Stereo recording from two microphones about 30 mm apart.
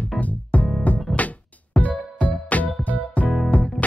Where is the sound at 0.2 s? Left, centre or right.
Left.